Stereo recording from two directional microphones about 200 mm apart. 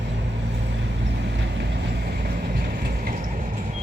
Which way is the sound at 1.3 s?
55° right (ahead or behind).